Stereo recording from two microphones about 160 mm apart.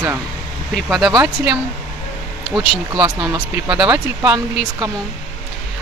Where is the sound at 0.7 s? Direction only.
Centre (ahead or behind).